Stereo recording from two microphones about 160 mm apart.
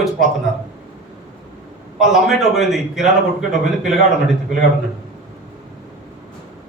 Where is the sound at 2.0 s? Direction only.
Centre (ahead or behind).